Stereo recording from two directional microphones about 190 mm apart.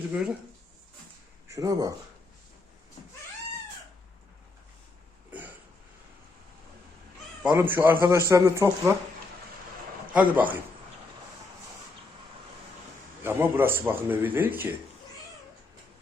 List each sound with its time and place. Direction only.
0.1 s speech: 5° right (ahead or behind)
1.5 s speech: 20° right (ahead or behind)
5.3 s burping: 10° right (ahead or behind)
7.4 s a man's voice: 10° right (ahead or behind)
10.2 s a man's voice: 10° right (ahead or behind)
13.2 s a man's voice: 10° right (ahead or behind)